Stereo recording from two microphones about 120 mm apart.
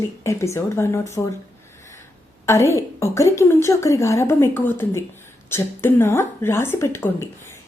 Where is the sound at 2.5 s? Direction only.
25° left (ahead or behind).